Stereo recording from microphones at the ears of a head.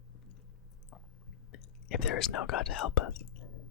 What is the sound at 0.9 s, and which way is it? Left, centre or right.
Speech, left.